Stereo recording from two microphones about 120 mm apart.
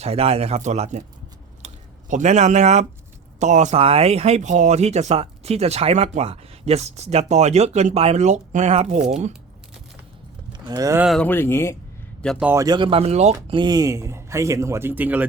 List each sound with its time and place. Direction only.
0.0 s speech: 55° right (ahead or behind); by 1.0 s 75° right (ahead or behind)
1.6 s a sound: 80° right
3.4 s speech: 85° right
3.8 s speech: 55° right (ahead or behind)
10.5 s speech: 30° right (ahead or behind)
11.2 s speech: 15° left (ahead or behind)
12.2 s a man's voice: 10° left (ahead or behind)
12.5 s speech: 35° right (ahead or behind); by 13.3 s 60° right (ahead or behind)
13.5 s speech: 40° right (ahead or behind); by 15.3 s 15° right (ahead or behind)